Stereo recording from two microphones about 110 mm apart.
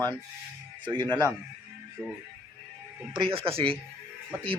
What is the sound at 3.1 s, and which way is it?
Speech, 50° right (ahead or behind).